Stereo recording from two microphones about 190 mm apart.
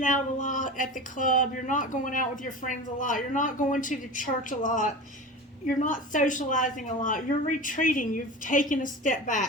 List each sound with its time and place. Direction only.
0.0 s speech: 40° left (ahead or behind)